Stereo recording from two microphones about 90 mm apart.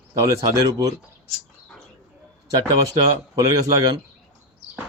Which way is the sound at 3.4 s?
40° right (ahead or behind).